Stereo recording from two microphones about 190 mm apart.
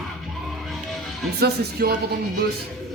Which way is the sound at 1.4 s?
55° right (ahead or behind).